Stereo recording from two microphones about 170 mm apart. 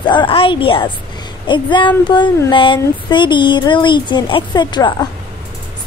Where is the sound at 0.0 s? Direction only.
25° left (ahead or behind).